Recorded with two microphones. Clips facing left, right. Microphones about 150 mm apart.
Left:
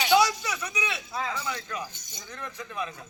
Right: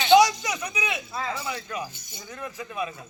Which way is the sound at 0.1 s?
15° right (ahead or behind).